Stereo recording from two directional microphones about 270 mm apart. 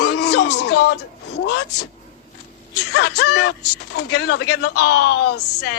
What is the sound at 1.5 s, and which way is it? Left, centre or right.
Speech, left.